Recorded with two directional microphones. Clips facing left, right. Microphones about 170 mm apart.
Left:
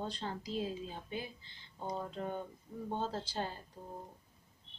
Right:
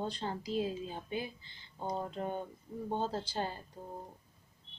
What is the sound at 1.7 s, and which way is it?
Speech, 15° right (ahead or behind).